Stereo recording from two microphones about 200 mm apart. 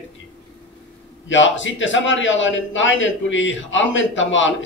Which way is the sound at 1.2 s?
70° left (ahead or behind).